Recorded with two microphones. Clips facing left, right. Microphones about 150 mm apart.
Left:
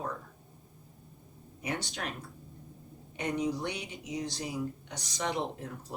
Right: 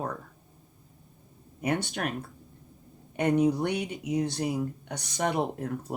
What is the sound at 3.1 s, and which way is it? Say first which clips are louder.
Speech: right 8 dB; 55° right (ahead or behind).